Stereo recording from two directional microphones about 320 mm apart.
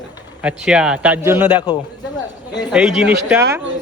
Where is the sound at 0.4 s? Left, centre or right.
Centre.